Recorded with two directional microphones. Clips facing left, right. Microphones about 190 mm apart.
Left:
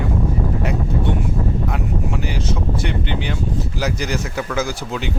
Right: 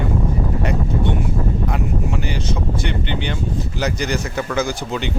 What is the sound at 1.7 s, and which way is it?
Speech, 5° left (ahead or behind).